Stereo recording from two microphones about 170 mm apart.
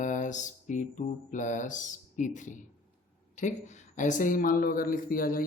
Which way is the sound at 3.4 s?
45° left (ahead or behind).